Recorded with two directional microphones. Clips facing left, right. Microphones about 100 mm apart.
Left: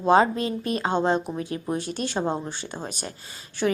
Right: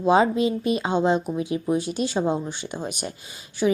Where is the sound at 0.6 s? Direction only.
45° left (ahead or behind).